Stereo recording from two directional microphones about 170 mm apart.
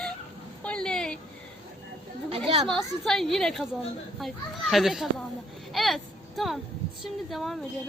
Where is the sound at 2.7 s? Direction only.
Centre (ahead or behind).